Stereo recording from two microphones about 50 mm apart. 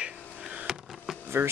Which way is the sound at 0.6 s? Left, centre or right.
Centre.